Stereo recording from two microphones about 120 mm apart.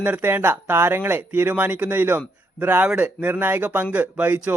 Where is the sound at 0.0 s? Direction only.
15° right (ahead or behind).